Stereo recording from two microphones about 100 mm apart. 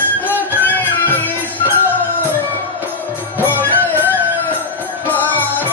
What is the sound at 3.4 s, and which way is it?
Music, 20° left (ahead or behind).